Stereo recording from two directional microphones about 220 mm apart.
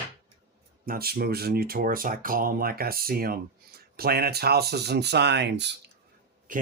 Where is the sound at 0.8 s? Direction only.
40° right (ahead or behind).